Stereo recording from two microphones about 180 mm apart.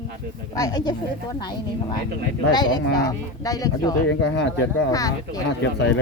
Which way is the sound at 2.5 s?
25° left (ahead or behind).